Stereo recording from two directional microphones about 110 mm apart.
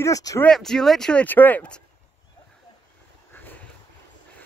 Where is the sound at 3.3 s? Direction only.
15° left (ahead or behind).